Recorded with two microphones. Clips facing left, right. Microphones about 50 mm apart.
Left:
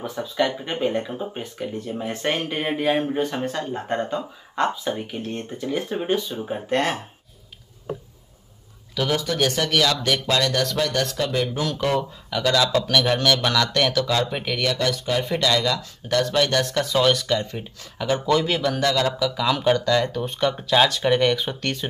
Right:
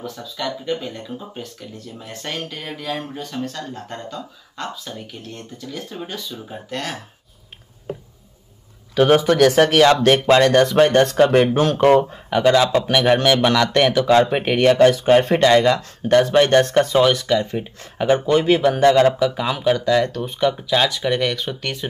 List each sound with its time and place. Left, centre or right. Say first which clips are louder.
0.0 s speech: left 4 dB; left
8.9 s speech: right 9 dB; right
9.7 s speech: right 8 dB; right
10.8 s speech: right 10 dB; right
12.3 s speech: right 5 dB; right
17.3 s speech: right 5 dB; centre
17.9 s speech: right 4 dB; right
19.8 s speech: right 3 dB; centre